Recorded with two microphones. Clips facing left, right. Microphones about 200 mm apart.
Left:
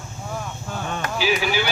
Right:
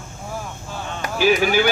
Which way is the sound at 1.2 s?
50° right (ahead or behind).